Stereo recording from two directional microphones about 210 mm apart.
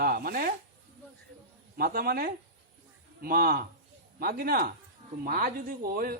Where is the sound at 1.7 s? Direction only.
45° right (ahead or behind).